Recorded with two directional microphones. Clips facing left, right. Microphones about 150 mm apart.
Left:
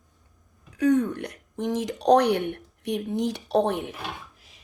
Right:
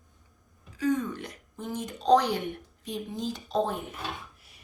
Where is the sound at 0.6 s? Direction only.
65° left (ahead or behind).